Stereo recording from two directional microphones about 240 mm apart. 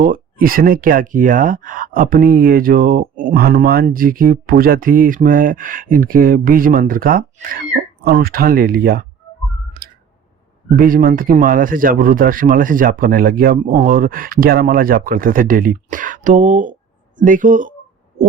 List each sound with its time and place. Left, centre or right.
0.0 s speech: right
10.8 s speech: right